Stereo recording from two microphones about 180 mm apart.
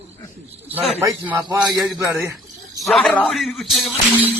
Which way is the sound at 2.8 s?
Centre (ahead or behind).